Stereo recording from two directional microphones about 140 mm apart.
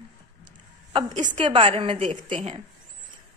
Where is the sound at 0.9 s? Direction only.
35° right (ahead or behind).